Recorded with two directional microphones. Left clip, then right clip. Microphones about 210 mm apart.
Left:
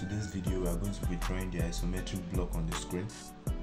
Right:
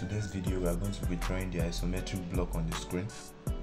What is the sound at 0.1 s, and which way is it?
Music, 20° right (ahead or behind).